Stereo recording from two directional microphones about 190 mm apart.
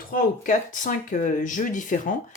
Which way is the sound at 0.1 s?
45° left (ahead or behind).